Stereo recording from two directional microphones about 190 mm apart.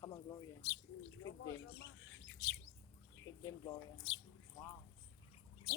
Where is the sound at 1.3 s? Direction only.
75° left (ahead or behind).